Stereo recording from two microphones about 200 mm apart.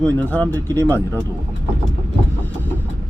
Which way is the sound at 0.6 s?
15° right (ahead or behind).